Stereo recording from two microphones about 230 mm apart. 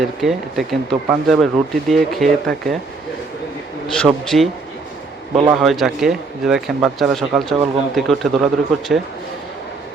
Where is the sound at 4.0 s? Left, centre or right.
Centre.